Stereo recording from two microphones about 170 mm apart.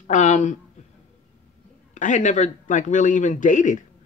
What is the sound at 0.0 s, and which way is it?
Speech, 45° left (ahead or behind).